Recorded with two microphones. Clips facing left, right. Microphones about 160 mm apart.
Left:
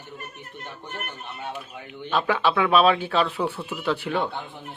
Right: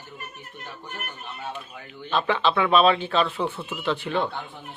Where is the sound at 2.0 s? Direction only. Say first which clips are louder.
Even; 5° left (ahead or behind).